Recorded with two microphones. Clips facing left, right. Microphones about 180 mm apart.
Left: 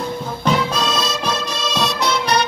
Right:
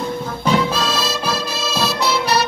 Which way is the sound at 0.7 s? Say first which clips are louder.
Even; 5° right (ahead or behind).